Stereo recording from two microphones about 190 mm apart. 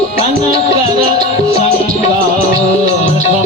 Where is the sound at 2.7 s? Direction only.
35° left (ahead or behind).